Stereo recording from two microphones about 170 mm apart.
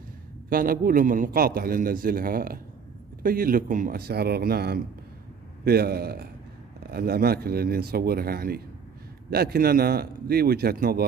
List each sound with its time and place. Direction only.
0.5 s a man's voice: 55° right (ahead or behind)